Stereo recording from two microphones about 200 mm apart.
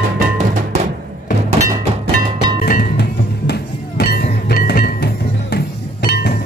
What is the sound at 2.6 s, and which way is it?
Music, 45° left (ahead or behind).